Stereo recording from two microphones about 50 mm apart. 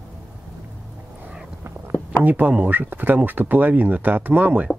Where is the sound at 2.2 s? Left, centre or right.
Right.